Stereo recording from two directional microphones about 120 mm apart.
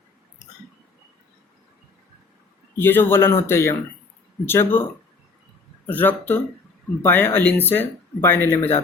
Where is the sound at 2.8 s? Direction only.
15° left (ahead or behind).